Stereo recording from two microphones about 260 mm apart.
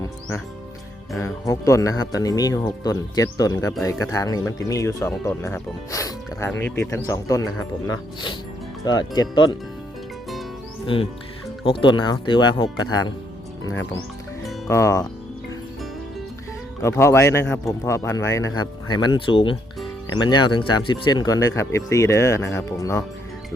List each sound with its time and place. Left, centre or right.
1.2 s speech: centre
10.8 s speech: left
14.7 s speech: centre
16.8 s speech: centre